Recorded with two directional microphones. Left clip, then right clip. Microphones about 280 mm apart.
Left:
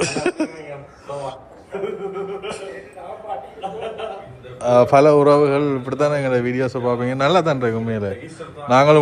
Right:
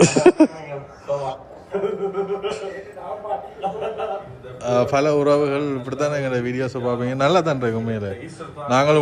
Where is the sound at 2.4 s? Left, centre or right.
Centre.